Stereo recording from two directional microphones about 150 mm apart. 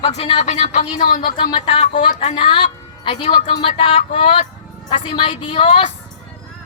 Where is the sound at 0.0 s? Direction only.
40° left (ahead or behind); by 1.4 s 65° left (ahead or behind).